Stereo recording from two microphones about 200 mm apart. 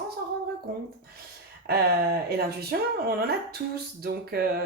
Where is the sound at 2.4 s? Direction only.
50° right (ahead or behind).